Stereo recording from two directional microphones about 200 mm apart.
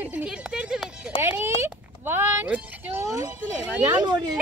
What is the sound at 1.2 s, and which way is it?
Speech, 10° right (ahead or behind).